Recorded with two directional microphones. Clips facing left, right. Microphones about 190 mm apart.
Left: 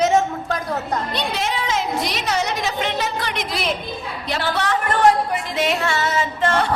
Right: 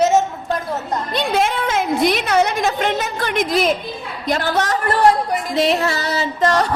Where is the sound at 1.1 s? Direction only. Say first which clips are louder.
Right 5 dB; 50° right (ahead or behind).